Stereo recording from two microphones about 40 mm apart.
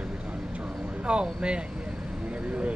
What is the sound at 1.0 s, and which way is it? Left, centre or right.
Speech, right.